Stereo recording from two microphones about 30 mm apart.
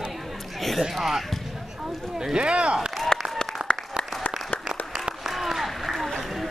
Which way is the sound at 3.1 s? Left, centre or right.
Left.